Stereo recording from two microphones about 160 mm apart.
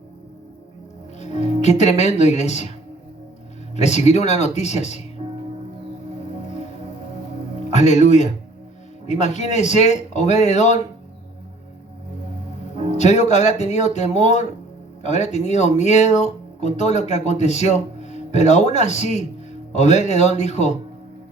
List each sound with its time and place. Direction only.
1.2 s speech: 45° left (ahead or behind)
3.8 s speech: 45° left (ahead or behind)
7.7 s speech: 45° left (ahead or behind)
13.0 s speech: 45° left (ahead or behind)